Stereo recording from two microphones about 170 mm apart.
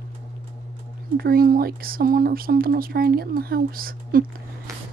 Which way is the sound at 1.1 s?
60° right (ahead or behind).